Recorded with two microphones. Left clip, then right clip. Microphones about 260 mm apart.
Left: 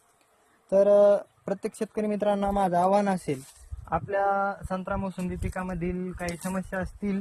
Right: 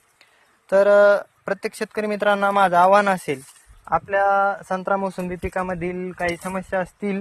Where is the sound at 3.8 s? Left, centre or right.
Right.